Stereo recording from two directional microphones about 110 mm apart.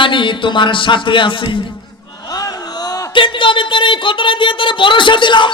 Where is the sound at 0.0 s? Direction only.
50° left (ahead or behind).